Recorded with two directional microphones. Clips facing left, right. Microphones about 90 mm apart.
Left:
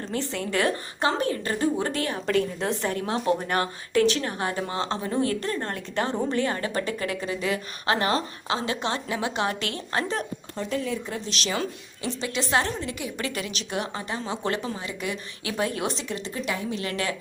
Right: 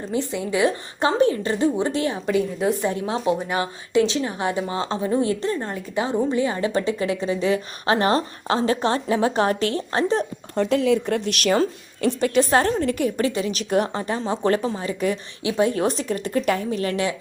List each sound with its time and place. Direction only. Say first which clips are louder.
0.1 s a woman's voice: right 5 dB; 15° right (ahead or behind)
5.6 s a woman's voice: right 3 dB; 10° right (ahead or behind); by 10.2 s 30° right (ahead or behind)
10.6 s a woman's voice: right 10 dB; 90° right; by 13.2 s 50° right (ahead or behind)
13.2 s a woman's voice: right 8 dB; 35° right (ahead or behind)
15.4 s a woman's voice: right 7 dB; 25° right (ahead or behind)
15.7 s a woman's voice: right 7 dB; 40° right (ahead or behind)